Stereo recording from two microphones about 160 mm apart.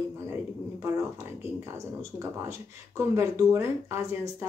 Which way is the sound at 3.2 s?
15° right (ahead or behind).